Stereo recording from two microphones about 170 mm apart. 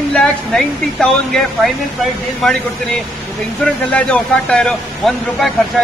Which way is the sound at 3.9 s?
5° left (ahead or behind).